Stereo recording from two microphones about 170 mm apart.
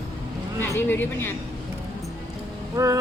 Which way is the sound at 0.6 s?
15° left (ahead or behind).